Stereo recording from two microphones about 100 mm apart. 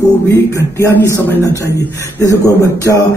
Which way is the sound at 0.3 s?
30° left (ahead or behind).